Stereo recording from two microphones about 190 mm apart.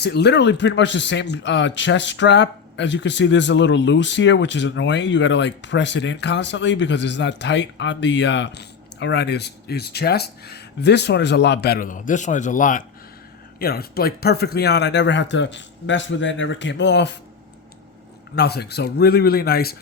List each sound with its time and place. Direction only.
0.0 s speech: 60° left (ahead or behind); by 12.8 s 45° left (ahead or behind)
13.6 s speech: 55° left (ahead or behind)
18.3 s speech: 60° left (ahead or behind)